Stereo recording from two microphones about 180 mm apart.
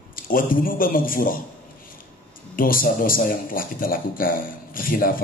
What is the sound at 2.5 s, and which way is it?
A man's voice, 50° left (ahead or behind).